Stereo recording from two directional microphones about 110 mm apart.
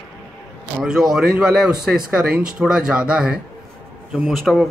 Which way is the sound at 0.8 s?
5° right (ahead or behind).